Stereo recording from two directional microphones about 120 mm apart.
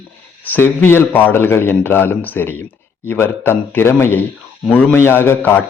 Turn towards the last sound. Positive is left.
turn(degrees=15)  # may be behind; listen again after turning